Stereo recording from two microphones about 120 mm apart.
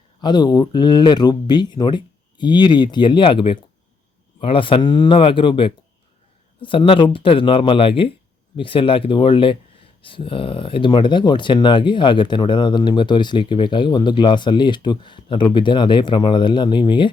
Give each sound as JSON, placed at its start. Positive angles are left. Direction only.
{"t": 0.2, "sound": "speech", "side_deg": 35}